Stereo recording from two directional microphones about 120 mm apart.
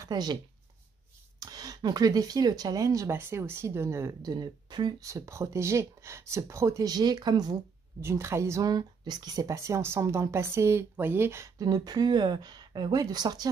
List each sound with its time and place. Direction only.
0.0 s speech: 35° right (ahead or behind)
1.4 s speech: 30° right (ahead or behind)
8.0 s speech: 20° right (ahead or behind)